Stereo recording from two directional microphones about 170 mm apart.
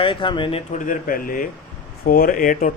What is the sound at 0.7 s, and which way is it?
Speech, 50° left (ahead or behind).